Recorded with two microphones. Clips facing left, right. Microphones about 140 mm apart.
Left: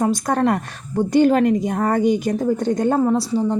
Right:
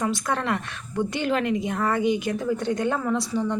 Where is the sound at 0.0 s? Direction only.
40° left (ahead or behind).